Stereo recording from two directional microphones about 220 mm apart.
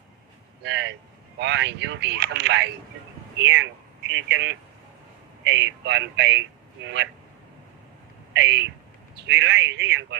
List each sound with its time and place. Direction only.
0.6 s speech: 55° right (ahead or behind)
8.3 s speech: 55° right (ahead or behind)